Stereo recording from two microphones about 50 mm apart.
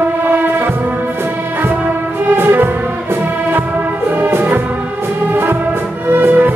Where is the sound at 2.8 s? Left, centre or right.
Right.